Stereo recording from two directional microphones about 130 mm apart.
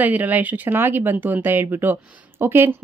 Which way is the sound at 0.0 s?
10° right (ahead or behind).